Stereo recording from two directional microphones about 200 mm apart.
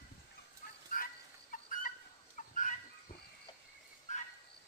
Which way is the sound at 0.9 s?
45° left (ahead or behind).